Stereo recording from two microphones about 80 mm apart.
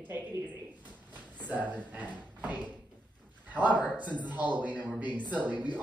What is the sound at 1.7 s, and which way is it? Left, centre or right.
A man's voice, centre.